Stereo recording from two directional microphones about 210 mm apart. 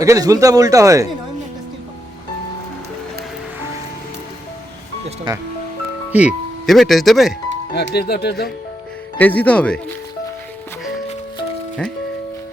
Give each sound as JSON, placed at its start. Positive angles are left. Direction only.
{"t": 0.0, "sound": "speech", "side_deg": -15}
{"t": 5.0, "sound": "speech", "side_deg": -20}
{"t": 6.1, "sound": "speech", "side_deg": -5}
{"t": 7.7, "sound": "speech", "side_deg": 50}
{"t": 9.1, "sound": "speech", "side_deg": 10}